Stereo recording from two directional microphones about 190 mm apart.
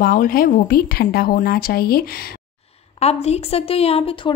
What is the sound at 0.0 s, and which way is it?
Speech, 50° left (ahead or behind).